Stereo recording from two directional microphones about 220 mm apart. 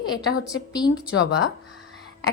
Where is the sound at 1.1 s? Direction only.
70° left (ahead or behind).